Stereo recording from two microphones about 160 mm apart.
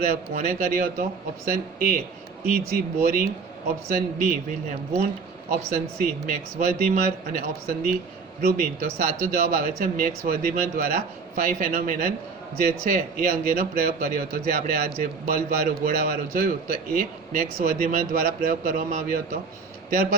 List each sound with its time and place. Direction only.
0.0 s a man's voice: 60° right (ahead or behind)
5.5 s a man's voice: 65° right (ahead or behind)